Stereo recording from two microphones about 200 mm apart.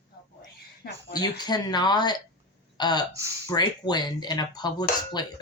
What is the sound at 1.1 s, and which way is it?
A child's voice, 20° left (ahead or behind).